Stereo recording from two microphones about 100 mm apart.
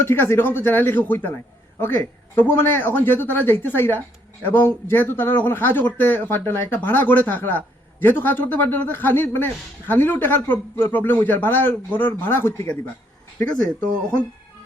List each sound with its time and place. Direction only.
0.0 s speech: 25° left (ahead or behind)